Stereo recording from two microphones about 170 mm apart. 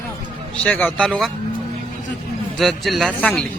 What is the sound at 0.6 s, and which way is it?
Speech, 10° left (ahead or behind).